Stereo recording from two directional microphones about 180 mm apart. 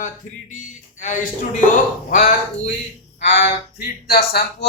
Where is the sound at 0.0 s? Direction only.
45° left (ahead or behind).